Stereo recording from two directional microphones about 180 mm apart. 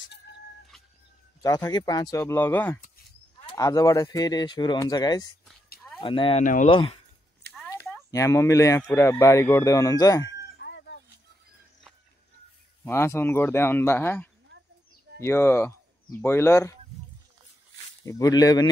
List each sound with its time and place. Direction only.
1.4 s speech: 20° left (ahead or behind)
6.4 s speech: 45° left (ahead or behind)
6.7 s speech: 30° left (ahead or behind)
7.4 s a sound: 65° right (ahead or behind)
8.1 s speech: 15° left (ahead or behind)
10.6 s cat: 70° left (ahead or behind)
12.8 s speech: 15° left (ahead or behind)
18.0 s speech: 20° left (ahead or behind)